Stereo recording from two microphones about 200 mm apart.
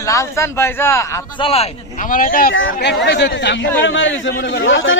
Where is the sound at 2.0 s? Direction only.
40° left (ahead or behind).